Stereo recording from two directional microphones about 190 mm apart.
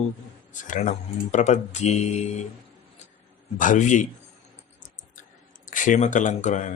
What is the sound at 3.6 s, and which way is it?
Speech, 40° left (ahead or behind).